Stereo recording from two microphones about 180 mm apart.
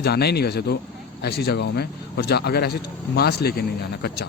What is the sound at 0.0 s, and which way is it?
A man's voice, 65° left (ahead or behind).